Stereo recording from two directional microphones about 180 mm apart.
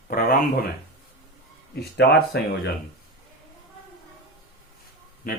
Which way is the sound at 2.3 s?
70° left (ahead or behind).